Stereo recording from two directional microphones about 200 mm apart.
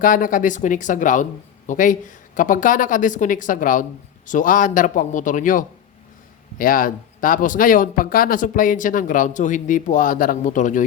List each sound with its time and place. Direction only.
0.0 s speech: 40° left (ahead or behind)